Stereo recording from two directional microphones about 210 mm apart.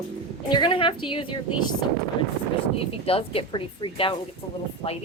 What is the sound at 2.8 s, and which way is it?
A woman's voice, 25° left (ahead or behind).